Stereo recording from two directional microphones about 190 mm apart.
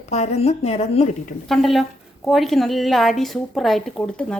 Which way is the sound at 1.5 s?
Centre (ahead or behind).